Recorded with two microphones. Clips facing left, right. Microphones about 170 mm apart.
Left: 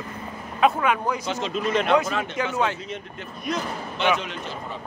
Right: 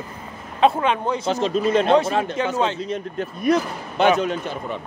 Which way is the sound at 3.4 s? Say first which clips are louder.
Right 8 dB; 50° right (ahead or behind).